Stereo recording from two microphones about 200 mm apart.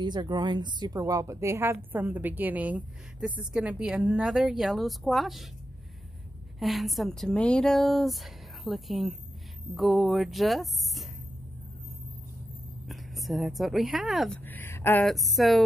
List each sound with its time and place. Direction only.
0.0 s a woman's voice: 20° right (ahead or behind); by 5.5 s centre (ahead or behind)
6.6 s a woman's voice: centre (ahead or behind)
12.8 s speech: centre (ahead or behind)
14.4 s speech: 10° left (ahead or behind)